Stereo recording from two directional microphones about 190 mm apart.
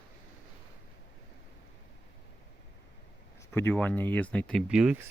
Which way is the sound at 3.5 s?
10° left (ahead or behind).